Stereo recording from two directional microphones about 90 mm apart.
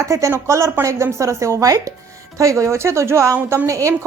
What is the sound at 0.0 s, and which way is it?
A woman's voice, 35° right (ahead or behind).